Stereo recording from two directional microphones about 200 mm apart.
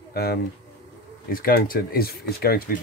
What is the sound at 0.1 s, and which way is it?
Speech, 50° left (ahead or behind).